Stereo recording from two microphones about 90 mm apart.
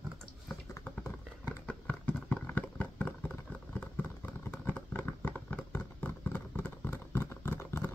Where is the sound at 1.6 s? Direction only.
10° left (ahead or behind).